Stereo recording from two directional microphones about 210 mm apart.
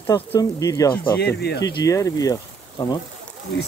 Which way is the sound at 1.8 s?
15° left (ahead or behind).